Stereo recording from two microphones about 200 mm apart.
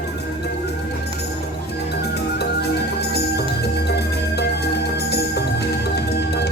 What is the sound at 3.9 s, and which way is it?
Music, 55° left (ahead or behind).